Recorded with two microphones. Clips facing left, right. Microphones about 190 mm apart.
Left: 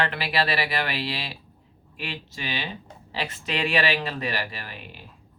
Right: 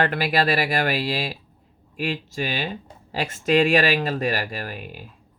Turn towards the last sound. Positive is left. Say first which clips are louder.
# right 7 dB
turn(degrees=-45)  # may be behind; listen again after turning